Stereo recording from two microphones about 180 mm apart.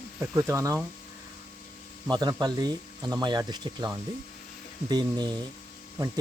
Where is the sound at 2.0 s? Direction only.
25° right (ahead or behind).